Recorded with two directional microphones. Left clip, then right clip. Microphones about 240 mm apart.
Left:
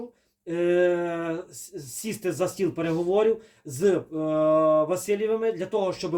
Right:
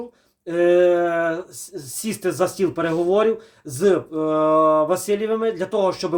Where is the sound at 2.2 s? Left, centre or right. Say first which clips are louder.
Right 6 dB; centre.